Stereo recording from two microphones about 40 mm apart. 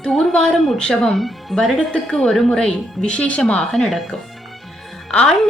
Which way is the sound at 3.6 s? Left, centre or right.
Centre.